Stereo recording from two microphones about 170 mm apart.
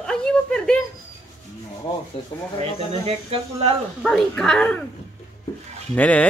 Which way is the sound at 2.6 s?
35° right (ahead or behind).